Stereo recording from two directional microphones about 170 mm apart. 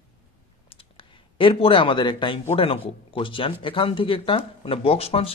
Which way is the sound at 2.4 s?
35° left (ahead or behind).